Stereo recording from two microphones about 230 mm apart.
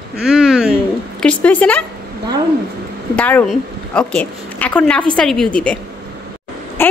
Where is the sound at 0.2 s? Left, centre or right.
Centre.